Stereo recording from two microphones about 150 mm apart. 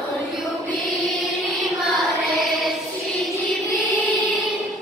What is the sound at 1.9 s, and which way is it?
Music, centre (ahead or behind).